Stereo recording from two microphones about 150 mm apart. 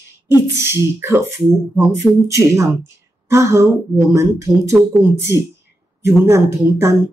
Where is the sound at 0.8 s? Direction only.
15° right (ahead or behind).